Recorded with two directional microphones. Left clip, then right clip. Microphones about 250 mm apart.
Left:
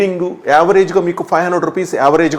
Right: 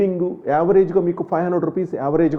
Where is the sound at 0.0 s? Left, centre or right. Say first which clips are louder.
Left 4 dB; centre.